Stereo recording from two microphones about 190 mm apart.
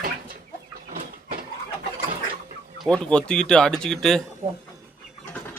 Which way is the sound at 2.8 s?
5° left (ahead or behind).